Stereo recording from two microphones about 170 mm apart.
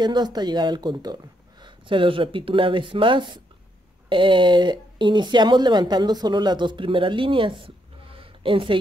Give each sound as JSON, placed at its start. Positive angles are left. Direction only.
{"t": 0.0, "sound": "speech", "side_deg": -25}